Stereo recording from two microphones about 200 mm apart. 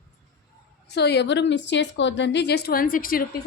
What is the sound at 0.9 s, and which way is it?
A woman's voice, 55° left (ahead or behind).